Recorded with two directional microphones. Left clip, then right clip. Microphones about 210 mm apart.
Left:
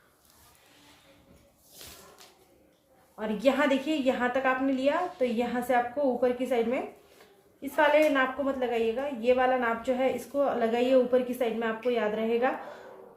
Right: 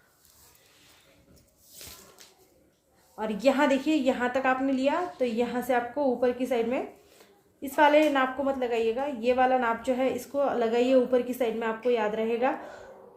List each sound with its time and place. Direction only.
3.2 s a woman's voice: 40° right (ahead or behind)